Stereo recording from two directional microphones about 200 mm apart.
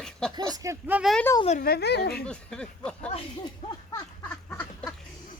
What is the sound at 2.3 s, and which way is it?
Speech, 5° left (ahead or behind).